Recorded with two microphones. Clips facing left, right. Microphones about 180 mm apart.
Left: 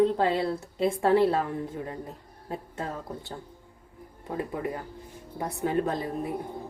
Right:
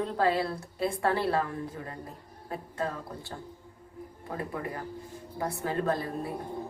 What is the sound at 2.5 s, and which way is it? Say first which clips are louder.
Speech: left 2 dB; 25° left (ahead or behind).